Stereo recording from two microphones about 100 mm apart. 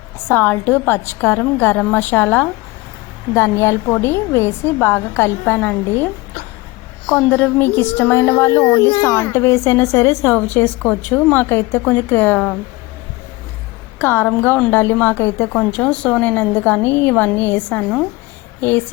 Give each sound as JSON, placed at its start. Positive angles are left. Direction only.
{"t": 0.3, "sound": "a woman's voice", "side_deg": 20}
{"t": 7.3, "sound": "a woman's voice", "side_deg": 15}
{"t": 10.3, "sound": "a woman's voice", "side_deg": 20}
{"t": 14.0, "sound": "a woman's voice", "side_deg": 20}